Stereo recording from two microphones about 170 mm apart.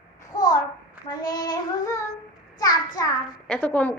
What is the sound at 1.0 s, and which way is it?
Child singing, 25° left (ahead or behind).